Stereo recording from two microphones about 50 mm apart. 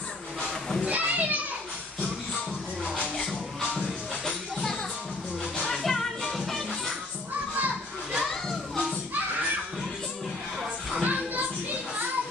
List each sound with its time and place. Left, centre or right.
0.8 s children playing: right
4.2 s music: centre
5.8 s music: centre
7.5 s children playing: right
11.0 s music: right